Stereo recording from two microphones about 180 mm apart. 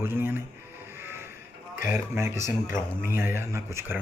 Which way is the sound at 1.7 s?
45° left (ahead or behind).